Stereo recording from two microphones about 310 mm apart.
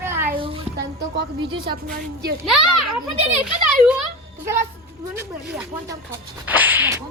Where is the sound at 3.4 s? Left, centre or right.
Centre.